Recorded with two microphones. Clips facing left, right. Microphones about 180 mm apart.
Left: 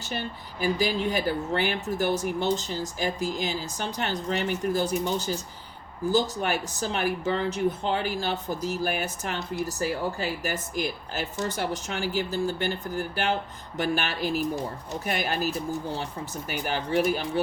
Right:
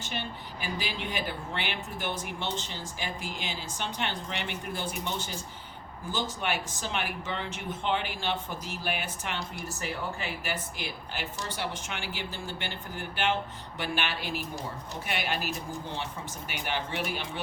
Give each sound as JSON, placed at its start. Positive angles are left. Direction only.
{"t": 0.0, "sound": "speech", "side_deg": 40}
{"t": 16.5, "sound": "speech", "side_deg": 40}